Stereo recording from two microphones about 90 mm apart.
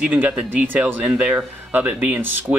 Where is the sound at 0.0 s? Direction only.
15° right (ahead or behind).